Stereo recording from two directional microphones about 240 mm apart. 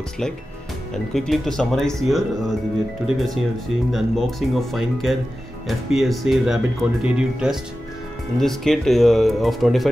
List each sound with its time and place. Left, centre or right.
0.9 s speech: centre